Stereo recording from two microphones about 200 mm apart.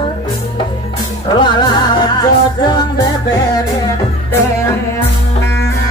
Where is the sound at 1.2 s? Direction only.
20° left (ahead or behind).